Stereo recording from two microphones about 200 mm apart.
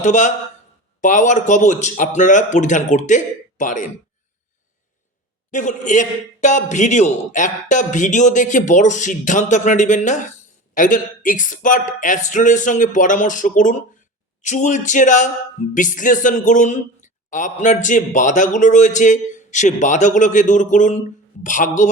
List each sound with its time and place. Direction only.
0.0 s a man's voice: 35° left (ahead or behind)
5.5 s a man's voice: 40° left (ahead or behind)